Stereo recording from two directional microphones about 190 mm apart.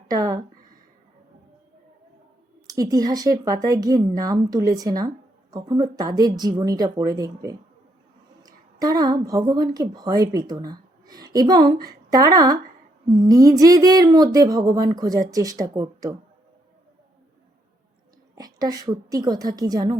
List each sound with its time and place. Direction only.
0.1 s a sound: 20° right (ahead or behind)
2.6 s a woman's voice: 20° right (ahead or behind)
18.3 s speech: 20° right (ahead or behind)